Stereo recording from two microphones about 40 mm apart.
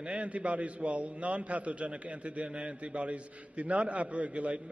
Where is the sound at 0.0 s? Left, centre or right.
Right.